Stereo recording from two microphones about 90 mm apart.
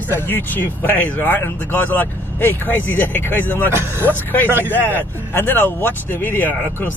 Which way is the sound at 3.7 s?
25° right (ahead or behind).